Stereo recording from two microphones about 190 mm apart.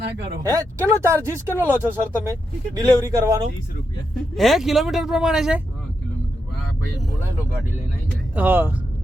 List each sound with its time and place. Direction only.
0.4 s speech: 15° right (ahead or behind)
4.4 s speech: centre (ahead or behind)
8.4 s speech: 10° right (ahead or behind)